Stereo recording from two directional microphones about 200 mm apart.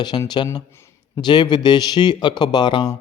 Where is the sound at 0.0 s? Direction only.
20° left (ahead or behind).